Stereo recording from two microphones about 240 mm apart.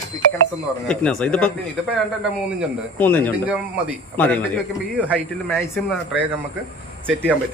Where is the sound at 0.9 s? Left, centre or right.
Centre.